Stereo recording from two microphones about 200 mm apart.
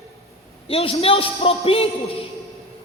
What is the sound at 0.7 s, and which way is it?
Speech, 30° left (ahead or behind).